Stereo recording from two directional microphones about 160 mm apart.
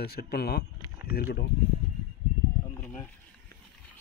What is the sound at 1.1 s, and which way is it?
Speech, 75° left (ahead or behind).